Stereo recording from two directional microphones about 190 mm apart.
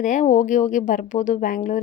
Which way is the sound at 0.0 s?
40° left (ahead or behind).